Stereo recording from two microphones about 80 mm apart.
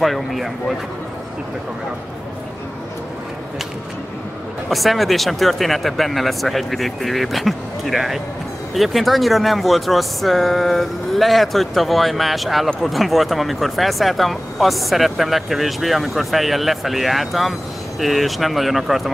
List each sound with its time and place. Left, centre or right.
0.0 s speech: centre
4.6 s speech: centre